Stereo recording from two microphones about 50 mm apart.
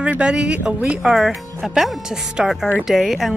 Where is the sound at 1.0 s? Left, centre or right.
Centre.